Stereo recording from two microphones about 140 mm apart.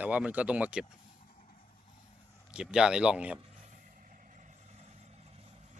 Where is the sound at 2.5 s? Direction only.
5° right (ahead or behind).